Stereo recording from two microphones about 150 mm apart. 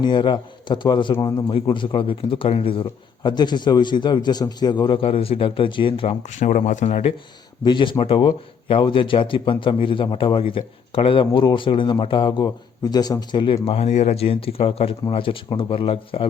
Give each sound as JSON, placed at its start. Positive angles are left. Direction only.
{"t": 0.0, "sound": "a man's voice", "side_deg": 30}
{"t": 7.6, "sound": "a man's voice", "side_deg": 30}
{"t": 13.7, "sound": "a man's voice", "side_deg": 45}